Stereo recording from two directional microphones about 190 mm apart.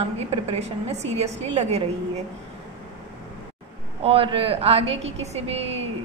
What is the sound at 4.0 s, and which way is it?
A woman's voice, 30° right (ahead or behind).